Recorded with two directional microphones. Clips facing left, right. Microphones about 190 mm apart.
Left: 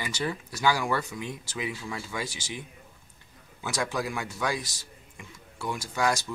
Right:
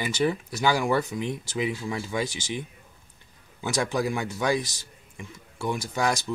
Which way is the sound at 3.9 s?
20° right (ahead or behind).